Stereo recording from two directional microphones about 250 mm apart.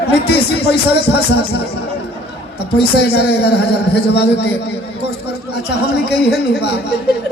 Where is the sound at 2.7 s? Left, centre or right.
Left.